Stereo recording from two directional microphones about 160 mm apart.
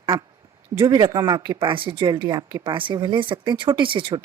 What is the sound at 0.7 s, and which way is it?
Speech, 15° right (ahead or behind).